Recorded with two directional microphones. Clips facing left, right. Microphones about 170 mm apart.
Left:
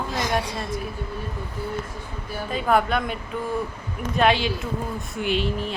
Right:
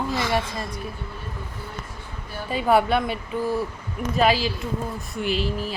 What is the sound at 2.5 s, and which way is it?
Speech, 5° right (ahead or behind).